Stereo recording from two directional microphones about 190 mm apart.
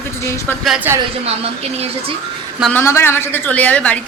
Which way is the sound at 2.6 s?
10° left (ahead or behind).